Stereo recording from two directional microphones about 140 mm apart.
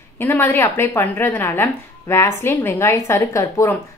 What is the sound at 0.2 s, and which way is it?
Speech, 15° left (ahead or behind).